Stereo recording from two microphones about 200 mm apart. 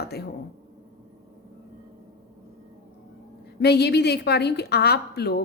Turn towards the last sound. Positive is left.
turn(degrees=55)  # may be behind; listen again after turning